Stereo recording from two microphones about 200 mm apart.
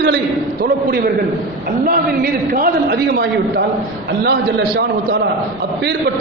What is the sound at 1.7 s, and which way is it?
A man's voice, 45° right (ahead or behind).